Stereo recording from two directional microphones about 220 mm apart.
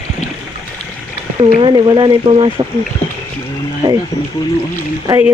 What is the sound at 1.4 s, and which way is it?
Speech, 30° right (ahead or behind).